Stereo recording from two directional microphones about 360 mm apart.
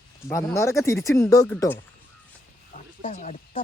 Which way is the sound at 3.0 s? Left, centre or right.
Centre.